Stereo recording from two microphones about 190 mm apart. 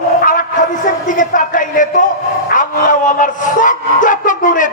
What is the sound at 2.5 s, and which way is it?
A man's voice, 45° left (ahead or behind).